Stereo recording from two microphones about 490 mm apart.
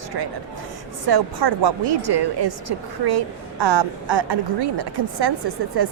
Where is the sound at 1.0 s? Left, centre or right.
Right.